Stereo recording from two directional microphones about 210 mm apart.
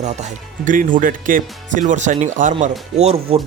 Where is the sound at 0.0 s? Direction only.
35° right (ahead or behind).